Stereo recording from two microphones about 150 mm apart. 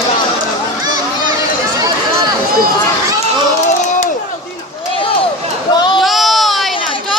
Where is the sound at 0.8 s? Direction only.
25° right (ahead or behind).